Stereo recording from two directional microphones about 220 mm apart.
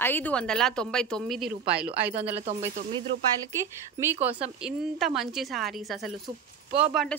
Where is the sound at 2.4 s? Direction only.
30° right (ahead or behind).